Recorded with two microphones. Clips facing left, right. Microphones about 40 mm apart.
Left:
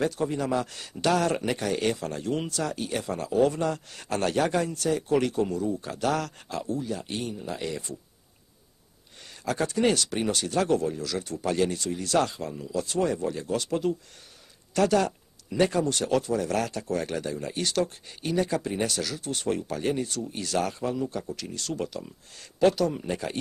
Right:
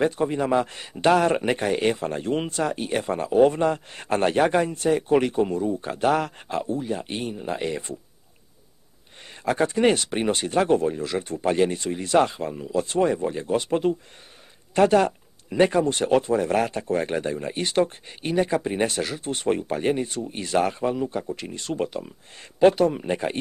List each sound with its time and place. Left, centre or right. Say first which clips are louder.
0.0 s speech: right 4 dB; right
9.4 s speech: right 5 dB; right